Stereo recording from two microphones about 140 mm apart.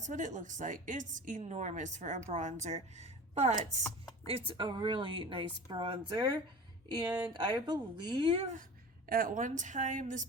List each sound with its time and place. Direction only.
0.0 s a woman's voice: 65° right (ahead or behind)
4.3 s a woman's voice: 40° right (ahead or behind)
7.1 s speech: 10° right (ahead or behind)
7.3 s a woman's voice: 35° right (ahead or behind)
9.0 s a woman's voice: 90° right; by 10.2 s 65° right (ahead or behind)